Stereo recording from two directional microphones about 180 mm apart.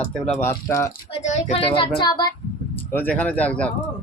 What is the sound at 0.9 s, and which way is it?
Speech, 40° left (ahead or behind).